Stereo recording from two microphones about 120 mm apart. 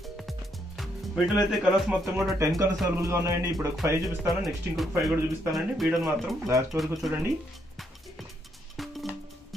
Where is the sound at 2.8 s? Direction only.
25° right (ahead or behind).